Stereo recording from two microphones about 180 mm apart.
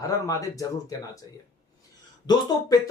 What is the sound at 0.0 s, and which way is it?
Speech, 20° left (ahead or behind).